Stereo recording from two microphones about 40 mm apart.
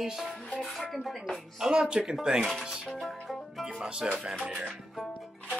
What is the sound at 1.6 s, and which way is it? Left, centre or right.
Speech, right.